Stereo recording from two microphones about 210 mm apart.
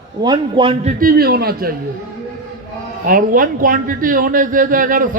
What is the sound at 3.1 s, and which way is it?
A man's voice, 40° right (ahead or behind).